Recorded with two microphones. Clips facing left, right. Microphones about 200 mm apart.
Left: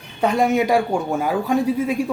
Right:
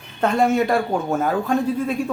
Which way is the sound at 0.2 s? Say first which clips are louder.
Even; 10° left (ahead or behind).